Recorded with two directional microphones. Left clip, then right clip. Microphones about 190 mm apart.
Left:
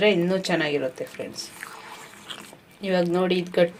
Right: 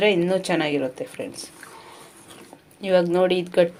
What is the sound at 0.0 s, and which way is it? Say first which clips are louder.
Speech: right 1 dB; 5° right (ahead or behind).